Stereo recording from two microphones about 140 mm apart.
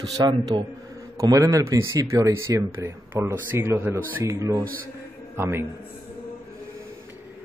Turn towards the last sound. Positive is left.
turn(degrees=-15)  # may be behind; listen again after turning